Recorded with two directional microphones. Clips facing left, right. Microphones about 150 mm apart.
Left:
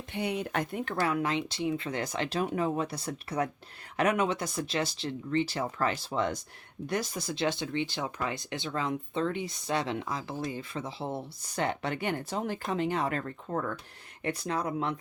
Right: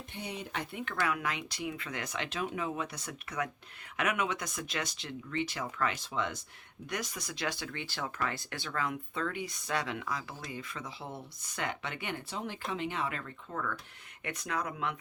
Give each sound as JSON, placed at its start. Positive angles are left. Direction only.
{"t": 0.1, "sound": "speech", "side_deg": 60}